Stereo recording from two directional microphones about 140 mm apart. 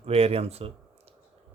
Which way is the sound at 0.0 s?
45° right (ahead or behind).